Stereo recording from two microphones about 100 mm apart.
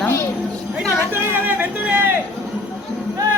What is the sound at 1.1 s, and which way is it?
Speech, 20° right (ahead or behind).